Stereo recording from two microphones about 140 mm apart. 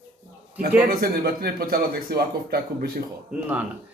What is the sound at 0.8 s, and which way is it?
Speech, 90° right.